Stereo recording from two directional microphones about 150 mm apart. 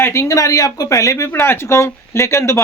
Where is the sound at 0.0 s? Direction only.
20° left (ahead or behind).